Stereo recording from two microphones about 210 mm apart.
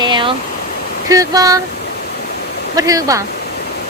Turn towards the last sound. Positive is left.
turn(degrees=-15)  # may be behind; listen again after turning